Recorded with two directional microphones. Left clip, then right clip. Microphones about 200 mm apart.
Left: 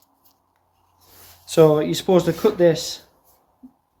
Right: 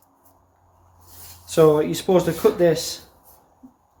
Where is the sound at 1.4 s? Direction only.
40° left (ahead or behind).